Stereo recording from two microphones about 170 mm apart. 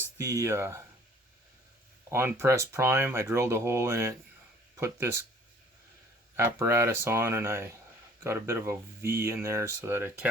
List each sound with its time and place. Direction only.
0.3 s speech: 20° right (ahead or behind)
2.0 s speech: 15° right (ahead or behind)
6.3 s speech: 15° right (ahead or behind)